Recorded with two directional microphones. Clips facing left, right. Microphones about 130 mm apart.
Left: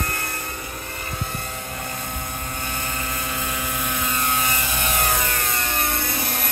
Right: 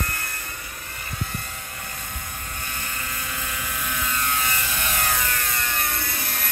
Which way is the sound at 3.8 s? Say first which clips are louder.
Left 1 dB; 25° left (ahead or behind).